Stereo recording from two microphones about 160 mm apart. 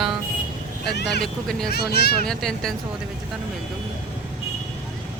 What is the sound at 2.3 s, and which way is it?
Speech, 5° left (ahead or behind).